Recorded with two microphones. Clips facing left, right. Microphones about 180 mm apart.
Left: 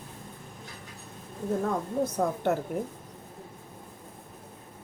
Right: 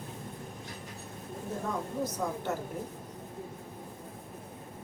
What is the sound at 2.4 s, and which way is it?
Speech, 60° left (ahead or behind).